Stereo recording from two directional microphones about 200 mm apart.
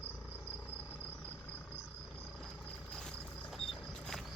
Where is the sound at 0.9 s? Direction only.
5° left (ahead or behind).